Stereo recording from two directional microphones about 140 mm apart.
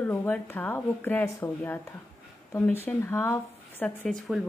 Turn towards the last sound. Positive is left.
turn(degrees=0)  # may be behind; listen again after turning